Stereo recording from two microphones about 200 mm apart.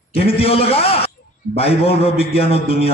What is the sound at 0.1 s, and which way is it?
A man's voice, 30° left (ahead or behind).